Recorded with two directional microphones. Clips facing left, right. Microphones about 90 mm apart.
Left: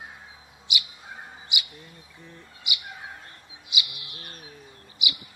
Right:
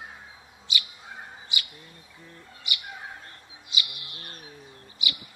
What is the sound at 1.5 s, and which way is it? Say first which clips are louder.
Bird: left 1 dB; 15° left (ahead or behind).